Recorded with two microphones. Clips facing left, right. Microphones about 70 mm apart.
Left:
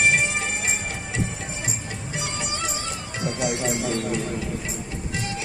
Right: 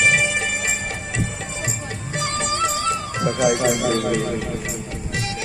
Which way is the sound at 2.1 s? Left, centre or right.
Right.